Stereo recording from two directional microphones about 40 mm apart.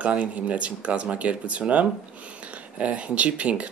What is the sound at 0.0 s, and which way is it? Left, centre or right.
Speech, right.